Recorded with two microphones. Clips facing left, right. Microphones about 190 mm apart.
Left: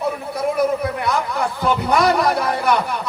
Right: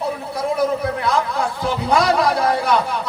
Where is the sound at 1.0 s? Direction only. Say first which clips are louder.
Right 1 dB; 60° left (ahead or behind).